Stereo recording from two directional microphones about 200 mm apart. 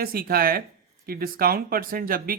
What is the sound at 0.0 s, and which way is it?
Speech, 50° right (ahead or behind).